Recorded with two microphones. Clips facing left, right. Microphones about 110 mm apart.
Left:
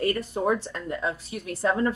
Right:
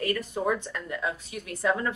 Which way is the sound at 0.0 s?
30° left (ahead or behind).